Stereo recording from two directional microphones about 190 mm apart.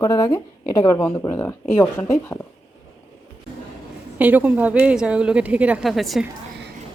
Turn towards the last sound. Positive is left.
turn(degrees=0)  # may be behind; listen again after turning